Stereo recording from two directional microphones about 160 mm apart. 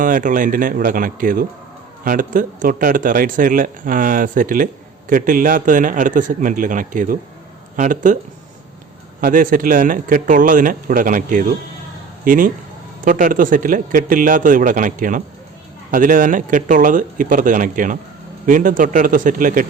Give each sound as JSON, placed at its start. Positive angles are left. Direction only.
{"t": 0.0, "sound": "speech", "side_deg": -55}
{"t": 9.2, "sound": "a man's voice", "side_deg": -55}